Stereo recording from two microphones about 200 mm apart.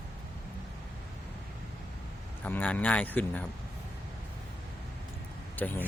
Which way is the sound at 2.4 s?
10° left (ahead or behind).